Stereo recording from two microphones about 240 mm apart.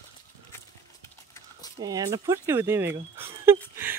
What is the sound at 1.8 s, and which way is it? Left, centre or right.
Speech, centre.